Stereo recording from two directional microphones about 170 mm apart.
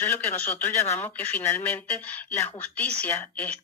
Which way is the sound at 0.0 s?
10° left (ahead or behind).